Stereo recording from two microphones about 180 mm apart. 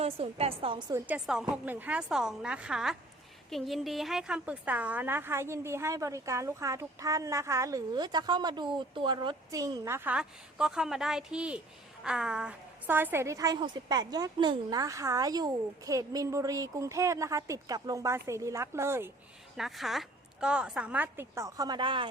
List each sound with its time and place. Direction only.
0.0 s a woman's voice: 35° right (ahead or behind)
1.0 s a woman's voice: 5° right (ahead or behind)
19.5 s a woman's voice: centre (ahead or behind); by 22.1 s 25° right (ahead or behind)